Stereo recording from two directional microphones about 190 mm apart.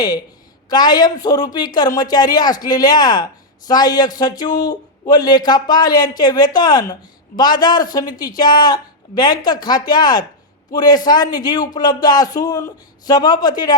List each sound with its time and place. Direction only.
0.7 s a man's voice: 20° left (ahead or behind)